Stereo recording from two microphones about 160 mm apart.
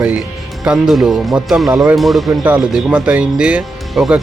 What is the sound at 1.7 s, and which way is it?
Speech, 20° right (ahead or behind).